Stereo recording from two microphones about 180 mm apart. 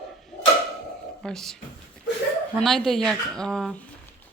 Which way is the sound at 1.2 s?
5° left (ahead or behind).